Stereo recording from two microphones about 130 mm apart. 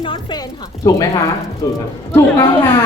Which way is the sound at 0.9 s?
25° left (ahead or behind).